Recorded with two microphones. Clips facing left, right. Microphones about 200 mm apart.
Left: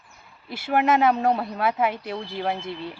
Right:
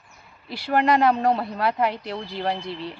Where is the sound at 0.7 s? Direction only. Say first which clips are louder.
Right 1 dB; 5° left (ahead or behind).